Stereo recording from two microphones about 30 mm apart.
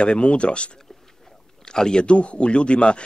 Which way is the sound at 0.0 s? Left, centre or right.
Left.